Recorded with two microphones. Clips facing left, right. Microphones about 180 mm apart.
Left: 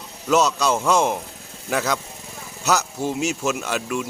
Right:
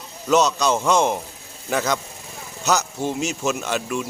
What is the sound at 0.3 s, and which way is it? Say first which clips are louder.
A man's voice: right 1 dB; 5° left (ahead or behind).